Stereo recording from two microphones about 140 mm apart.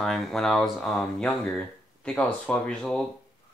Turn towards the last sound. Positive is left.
turn(degrees=5)  # may be behind; listen again after turning